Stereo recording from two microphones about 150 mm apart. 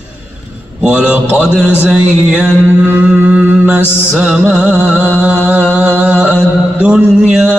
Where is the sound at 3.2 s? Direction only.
10° right (ahead or behind).